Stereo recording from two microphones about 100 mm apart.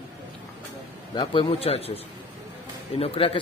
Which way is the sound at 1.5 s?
75° left (ahead or behind).